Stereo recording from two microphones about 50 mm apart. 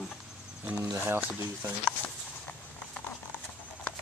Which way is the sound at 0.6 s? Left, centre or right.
Right.